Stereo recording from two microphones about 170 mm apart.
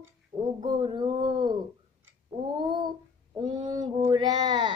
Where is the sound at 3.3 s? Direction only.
25° right (ahead or behind).